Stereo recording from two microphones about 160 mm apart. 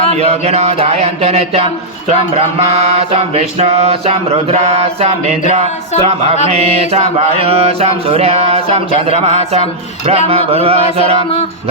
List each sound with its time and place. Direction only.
0.2 s mantra: 40° right (ahead or behind)